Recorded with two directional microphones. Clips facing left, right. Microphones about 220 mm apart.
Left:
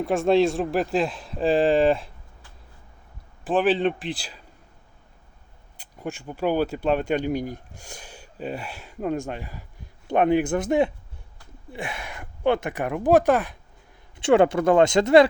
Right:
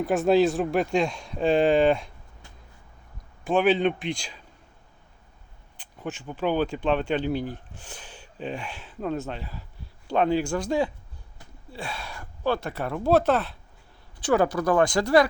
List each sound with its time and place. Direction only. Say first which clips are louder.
0.0 s speech: left 1 dB; centre (ahead or behind)
3.4 s speech: even; centre (ahead or behind)
5.7 s speech: left 2 dB; 10° left (ahead or behind)
14.2 s speech: left 5 dB; 25° left (ahead or behind)